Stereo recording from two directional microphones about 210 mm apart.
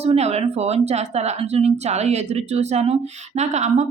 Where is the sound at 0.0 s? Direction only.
30° right (ahead or behind).